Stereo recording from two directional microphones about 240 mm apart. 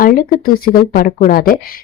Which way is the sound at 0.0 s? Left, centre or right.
Left.